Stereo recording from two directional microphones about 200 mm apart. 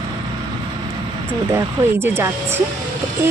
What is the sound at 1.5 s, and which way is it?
Speech, 10° right (ahead or behind).